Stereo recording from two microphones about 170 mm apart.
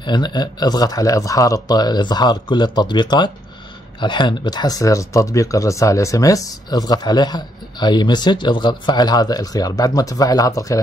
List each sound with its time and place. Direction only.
0.0 s speech: 25° left (ahead or behind)